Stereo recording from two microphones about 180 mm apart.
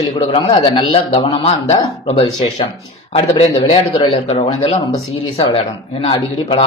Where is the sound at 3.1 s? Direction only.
35° left (ahead or behind).